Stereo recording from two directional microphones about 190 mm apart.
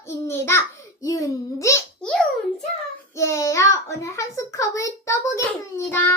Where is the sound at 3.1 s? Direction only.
15° left (ahead or behind).